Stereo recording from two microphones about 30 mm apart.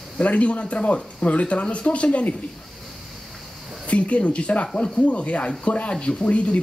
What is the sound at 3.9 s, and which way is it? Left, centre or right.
Speech, left.